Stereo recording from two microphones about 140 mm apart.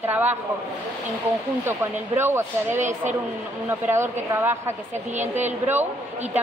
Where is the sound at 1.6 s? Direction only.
15° right (ahead or behind).